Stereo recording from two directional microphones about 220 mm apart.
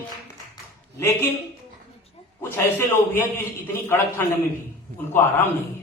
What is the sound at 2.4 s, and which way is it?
A man's voice, 10° left (ahead or behind).